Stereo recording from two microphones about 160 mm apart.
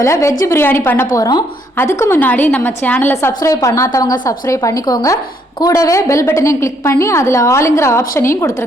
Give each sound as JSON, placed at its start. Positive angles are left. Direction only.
{"t": 0.0, "sound": "a woman's voice", "side_deg": 20}